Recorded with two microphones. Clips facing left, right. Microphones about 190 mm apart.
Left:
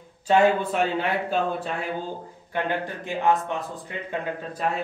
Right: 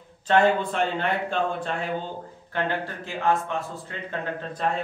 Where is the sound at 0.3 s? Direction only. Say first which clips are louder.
Left 1 dB; 10° left (ahead or behind).